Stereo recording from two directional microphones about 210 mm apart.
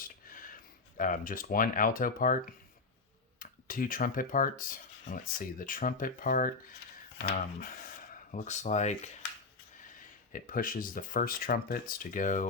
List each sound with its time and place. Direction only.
0.0 s a sound: 40° left (ahead or behind)
0.9 s speech: 40° left (ahead or behind)
3.4 s speech: 40° left (ahead or behind)
8.3 s speech: 35° left (ahead or behind)
10.3 s speech: 40° left (ahead or behind)